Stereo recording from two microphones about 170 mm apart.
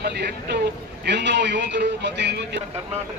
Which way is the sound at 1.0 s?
90° right.